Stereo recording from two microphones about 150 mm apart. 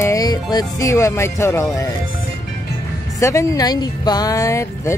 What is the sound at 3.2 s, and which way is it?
Speech, 20° left (ahead or behind).